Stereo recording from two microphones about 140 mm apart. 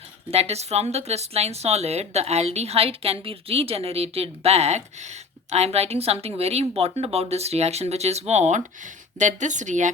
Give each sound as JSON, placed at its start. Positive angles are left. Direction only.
{"t": 0.3, "sound": "a woman's voice", "side_deg": -50}